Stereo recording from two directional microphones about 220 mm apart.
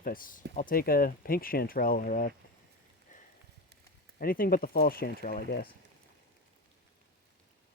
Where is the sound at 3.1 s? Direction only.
35° left (ahead or behind).